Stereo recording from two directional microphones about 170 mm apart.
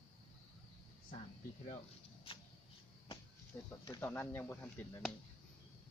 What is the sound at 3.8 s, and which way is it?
Speech, 20° left (ahead or behind).